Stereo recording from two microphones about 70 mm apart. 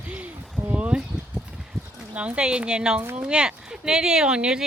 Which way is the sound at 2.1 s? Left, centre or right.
Centre.